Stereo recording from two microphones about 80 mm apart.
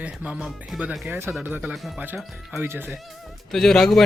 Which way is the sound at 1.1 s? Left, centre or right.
Right.